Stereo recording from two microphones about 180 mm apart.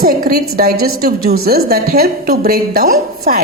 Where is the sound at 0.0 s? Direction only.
55° right (ahead or behind).